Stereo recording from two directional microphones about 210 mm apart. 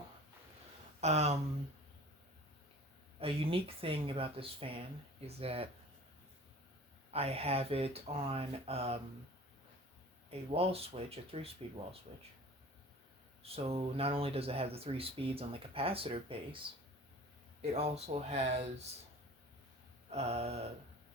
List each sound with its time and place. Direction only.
1.0 s speech: 30° right (ahead or behind)
3.2 s speech: 25° right (ahead or behind)
7.1 s speech: 30° right (ahead or behind)
10.2 s speech: 30° right (ahead or behind)
13.4 s speech: 30° right (ahead or behind)
17.6 s speech: 30° right (ahead or behind)
20.1 s speech: 30° right (ahead or behind)